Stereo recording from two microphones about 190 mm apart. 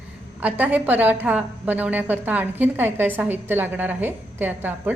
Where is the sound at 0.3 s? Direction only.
10° right (ahead or behind).